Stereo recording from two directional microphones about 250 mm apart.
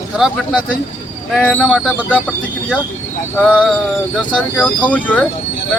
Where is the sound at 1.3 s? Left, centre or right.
Centre.